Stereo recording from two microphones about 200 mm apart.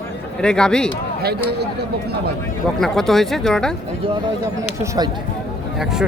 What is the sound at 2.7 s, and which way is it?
Speech, centre (ahead or behind).